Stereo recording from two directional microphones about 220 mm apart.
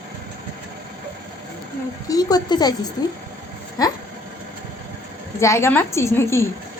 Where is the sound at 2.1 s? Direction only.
15° left (ahead or behind).